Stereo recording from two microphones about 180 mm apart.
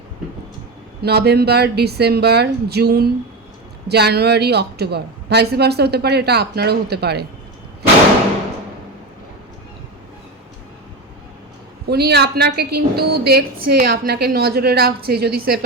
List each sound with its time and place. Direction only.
1.0 s a woman's voice: 65° right (ahead or behind)
11.9 s a woman's voice: 65° right (ahead or behind)